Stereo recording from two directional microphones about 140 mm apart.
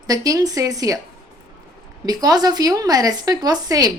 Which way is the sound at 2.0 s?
25° right (ahead or behind).